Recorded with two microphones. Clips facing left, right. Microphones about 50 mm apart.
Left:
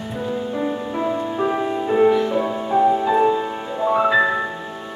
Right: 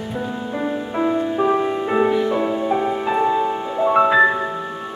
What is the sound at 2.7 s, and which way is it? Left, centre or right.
Music, right.